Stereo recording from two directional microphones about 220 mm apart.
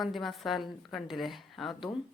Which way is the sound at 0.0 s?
Centre (ahead or behind).